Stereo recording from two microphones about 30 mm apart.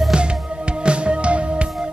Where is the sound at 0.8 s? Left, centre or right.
Right.